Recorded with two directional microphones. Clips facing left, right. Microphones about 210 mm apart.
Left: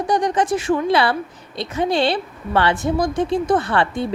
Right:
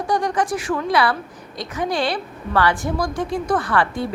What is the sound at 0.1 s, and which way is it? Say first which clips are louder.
A woman's voice: left 2 dB; 20° left (ahead or behind).